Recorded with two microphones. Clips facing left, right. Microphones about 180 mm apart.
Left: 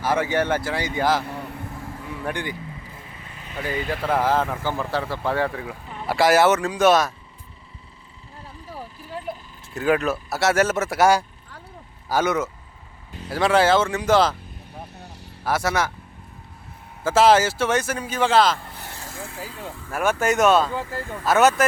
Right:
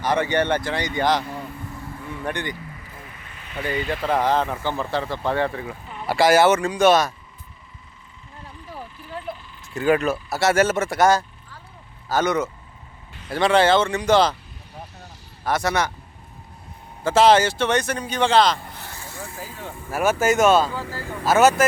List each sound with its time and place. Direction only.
0.0 s speech: 5° left (ahead or behind)
3.0 s vehicle: 25° left (ahead or behind)
3.6 s speech: 5° left (ahead or behind)
9.3 s vehicle: 10° left (ahead or behind)
9.7 s speech: centre (ahead or behind)
15.4 s speech: 5° left (ahead or behind)
17.0 s speech: 5° left (ahead or behind)
19.9 s speech: 5° right (ahead or behind)